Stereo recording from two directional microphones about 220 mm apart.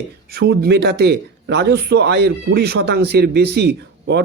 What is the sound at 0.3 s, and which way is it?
A man's voice, 45° right (ahead or behind).